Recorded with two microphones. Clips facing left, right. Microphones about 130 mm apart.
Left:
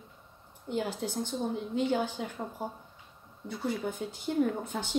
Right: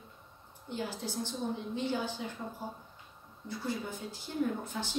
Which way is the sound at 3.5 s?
55° left (ahead or behind).